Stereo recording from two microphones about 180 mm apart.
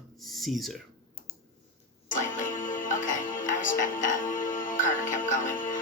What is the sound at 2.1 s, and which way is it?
Music, 45° left (ahead or behind).